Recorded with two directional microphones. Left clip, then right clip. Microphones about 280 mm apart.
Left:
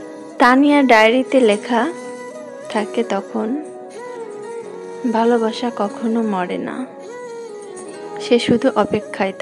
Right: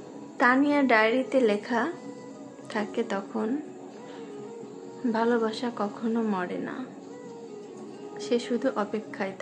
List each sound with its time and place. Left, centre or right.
0.4 s a woman's voice: left
5.1 s a woman's voice: left
8.2 s a woman's voice: left